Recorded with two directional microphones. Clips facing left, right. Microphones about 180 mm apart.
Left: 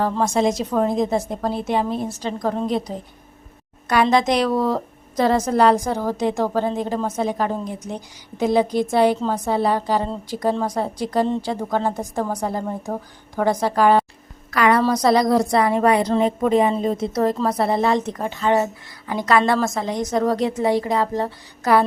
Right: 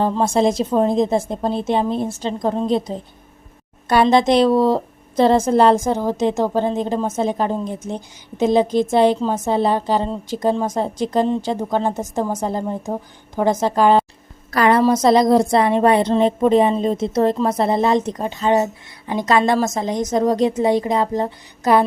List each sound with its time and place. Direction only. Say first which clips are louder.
0.0 s a woman's voice: right 2 dB; 30° right (ahead or behind)
14.5 s a woman's voice: right 3 dB; 35° right (ahead or behind)